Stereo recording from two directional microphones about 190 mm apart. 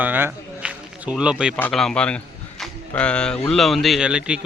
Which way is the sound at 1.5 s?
5° left (ahead or behind).